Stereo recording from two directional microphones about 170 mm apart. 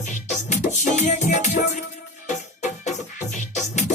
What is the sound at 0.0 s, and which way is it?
Music, 45° left (ahead or behind).